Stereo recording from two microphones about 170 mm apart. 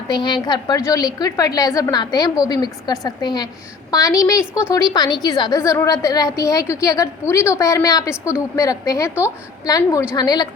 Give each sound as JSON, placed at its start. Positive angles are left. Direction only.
{"t": 0.1, "sound": "a woman's voice", "side_deg": 25}